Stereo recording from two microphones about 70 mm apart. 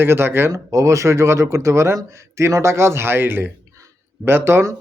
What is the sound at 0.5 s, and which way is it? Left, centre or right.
Speech, right.